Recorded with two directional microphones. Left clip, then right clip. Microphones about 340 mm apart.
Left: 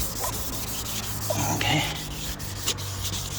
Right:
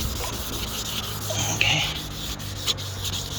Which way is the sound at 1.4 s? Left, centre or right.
Centre.